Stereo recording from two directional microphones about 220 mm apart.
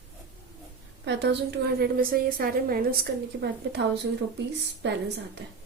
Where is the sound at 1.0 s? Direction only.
50° right (ahead or behind).